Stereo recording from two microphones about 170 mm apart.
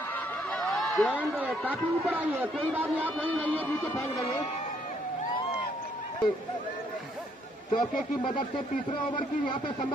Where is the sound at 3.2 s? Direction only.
10° left (ahead or behind).